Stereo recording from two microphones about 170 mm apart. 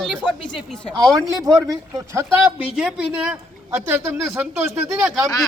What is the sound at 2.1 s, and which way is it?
A man's voice, 15° right (ahead or behind).